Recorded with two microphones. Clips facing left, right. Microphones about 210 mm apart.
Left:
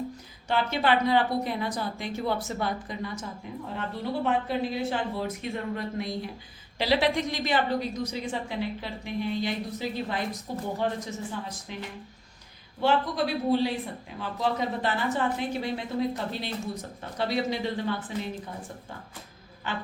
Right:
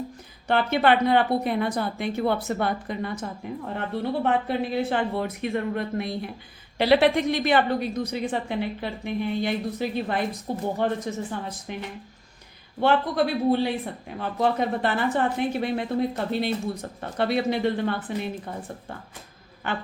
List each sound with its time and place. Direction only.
0.4 s a woman's voice: 55° right (ahead or behind)
12.8 s a woman's voice: 55° right (ahead or behind)
19.6 s a woman's voice: 60° right (ahead or behind)